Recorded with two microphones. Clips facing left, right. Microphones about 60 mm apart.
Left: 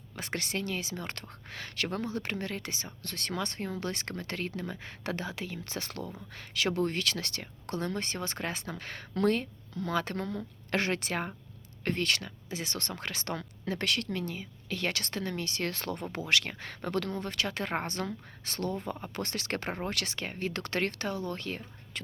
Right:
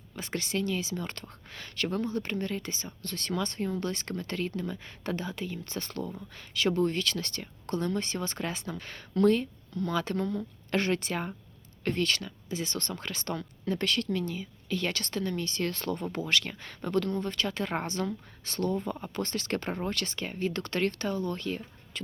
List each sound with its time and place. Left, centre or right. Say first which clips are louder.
0.2 s speech: right 3 dB; left
6.3 s speech: right 3 dB; left
8.7 s speech: right 3 dB; left
19.9 s speech: right 1 dB; left